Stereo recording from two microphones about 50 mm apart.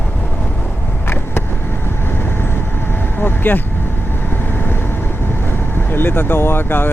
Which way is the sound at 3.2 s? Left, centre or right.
Left.